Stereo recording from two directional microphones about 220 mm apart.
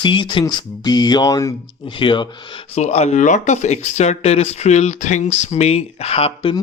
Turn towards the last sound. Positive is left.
turn(degrees=25)  # may be behind; listen again after turning